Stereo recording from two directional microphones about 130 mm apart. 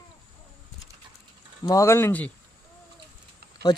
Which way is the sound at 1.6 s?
25° left (ahead or behind).